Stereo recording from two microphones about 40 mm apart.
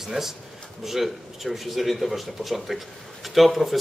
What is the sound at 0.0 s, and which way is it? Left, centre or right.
A man's voice, centre.